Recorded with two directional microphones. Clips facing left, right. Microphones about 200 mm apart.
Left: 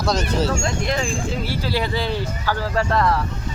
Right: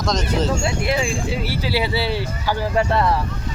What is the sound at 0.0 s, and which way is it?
Speech, 10° left (ahead or behind).